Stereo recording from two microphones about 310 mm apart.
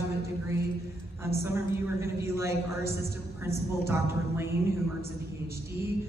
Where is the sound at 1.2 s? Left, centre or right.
Centre.